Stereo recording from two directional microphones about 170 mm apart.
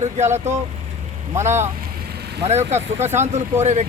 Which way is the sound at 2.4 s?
40° right (ahead or behind).